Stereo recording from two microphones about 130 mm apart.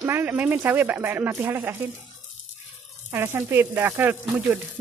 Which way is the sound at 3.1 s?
15° right (ahead or behind).